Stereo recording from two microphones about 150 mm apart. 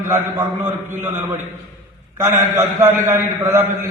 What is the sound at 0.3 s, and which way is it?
Speech, 15° right (ahead or behind).